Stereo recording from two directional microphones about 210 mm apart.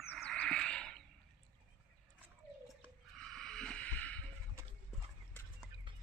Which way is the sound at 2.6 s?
Centre (ahead or behind).